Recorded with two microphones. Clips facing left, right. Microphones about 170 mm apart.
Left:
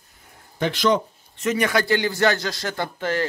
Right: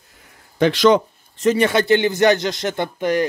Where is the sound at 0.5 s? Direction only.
90° right.